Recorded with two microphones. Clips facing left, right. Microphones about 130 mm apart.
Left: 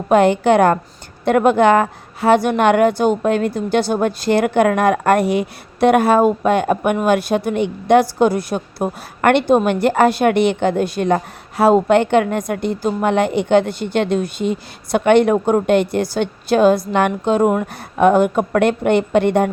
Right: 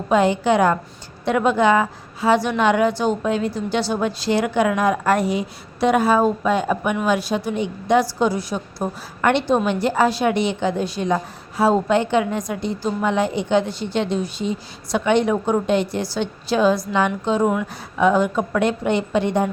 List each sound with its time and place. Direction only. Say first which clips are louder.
0.1 s a woman's voice: left 4 dB; 55° left (ahead or behind)